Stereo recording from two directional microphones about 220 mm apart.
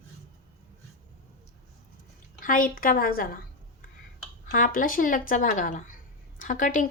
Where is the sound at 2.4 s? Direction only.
40° left (ahead or behind).